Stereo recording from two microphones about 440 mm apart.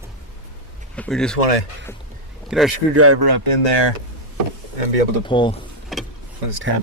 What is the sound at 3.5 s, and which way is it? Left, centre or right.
Speech, left.